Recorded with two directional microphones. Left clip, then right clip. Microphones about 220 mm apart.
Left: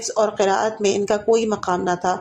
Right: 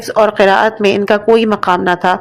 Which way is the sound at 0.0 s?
25° right (ahead or behind).